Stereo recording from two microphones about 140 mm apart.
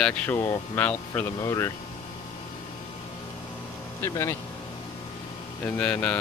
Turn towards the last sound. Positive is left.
turn(degrees=10)  # may be behind; listen again after turning